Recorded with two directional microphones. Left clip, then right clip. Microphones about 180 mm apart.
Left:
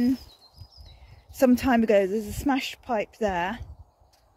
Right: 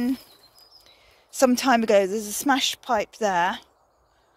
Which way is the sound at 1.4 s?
15° left (ahead or behind).